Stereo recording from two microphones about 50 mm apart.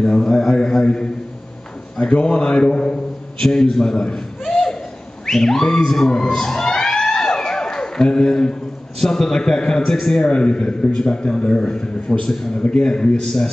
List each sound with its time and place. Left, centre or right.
0.0 s a man's voice: centre
2.0 s a man's voice: centre
5.2 s a sound: centre
9.0 s a man's voice: centre